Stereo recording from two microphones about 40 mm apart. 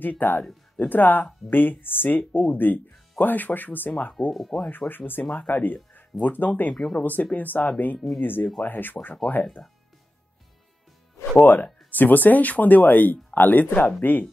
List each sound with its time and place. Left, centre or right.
0.0 s speech: left
4.3 s speech: centre
4.6 s speech: left
5.3 s speech: left
6.2 s speech: left
6.7 s speech: centre
7.0 s speech: left
11.3 s speech: left